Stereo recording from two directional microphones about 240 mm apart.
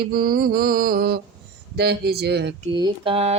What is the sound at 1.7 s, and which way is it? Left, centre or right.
Speech, right.